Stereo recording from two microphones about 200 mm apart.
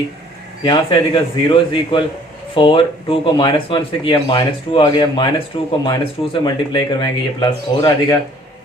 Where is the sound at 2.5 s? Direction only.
25° left (ahead or behind).